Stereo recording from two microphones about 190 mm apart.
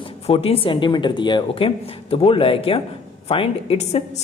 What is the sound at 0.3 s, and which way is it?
Speech, 30° left (ahead or behind).